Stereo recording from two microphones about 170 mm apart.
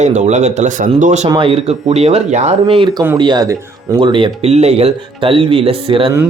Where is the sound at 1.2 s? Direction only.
30° right (ahead or behind).